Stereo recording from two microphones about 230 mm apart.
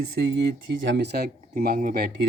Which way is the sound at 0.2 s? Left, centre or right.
Right.